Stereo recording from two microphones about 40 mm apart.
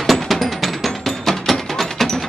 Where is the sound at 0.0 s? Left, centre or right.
Centre.